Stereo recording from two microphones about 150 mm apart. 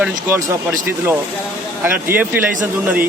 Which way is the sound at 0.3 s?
20° right (ahead or behind).